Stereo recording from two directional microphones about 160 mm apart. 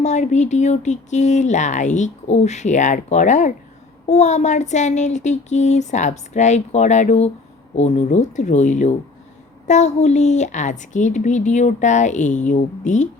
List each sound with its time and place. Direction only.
0.0 s speech: 45° left (ahead or behind)